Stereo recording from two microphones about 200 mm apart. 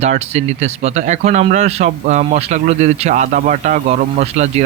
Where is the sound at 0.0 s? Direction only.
35° right (ahead or behind).